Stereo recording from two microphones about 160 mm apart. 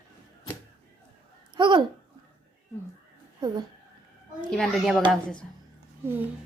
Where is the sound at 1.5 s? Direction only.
30° right (ahead or behind).